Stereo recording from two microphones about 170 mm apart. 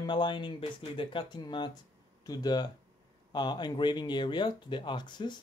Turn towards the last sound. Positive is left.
turn(degrees=25)  # may be behind; listen again after turning